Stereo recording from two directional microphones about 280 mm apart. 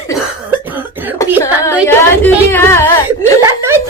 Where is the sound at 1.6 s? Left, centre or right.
Centre.